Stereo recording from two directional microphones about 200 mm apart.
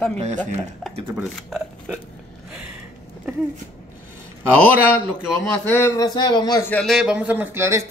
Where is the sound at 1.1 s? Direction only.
5° right (ahead or behind).